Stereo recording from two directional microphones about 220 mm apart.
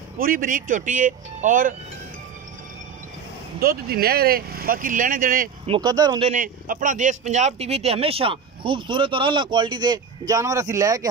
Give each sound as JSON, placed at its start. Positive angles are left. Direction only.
{"t": 0.2, "sound": "speech", "side_deg": -40}
{"t": 3.5, "sound": "speech", "side_deg": -45}
{"t": 5.7, "sound": "speech", "side_deg": -15}
{"t": 6.3, "sound": "speech", "side_deg": -40}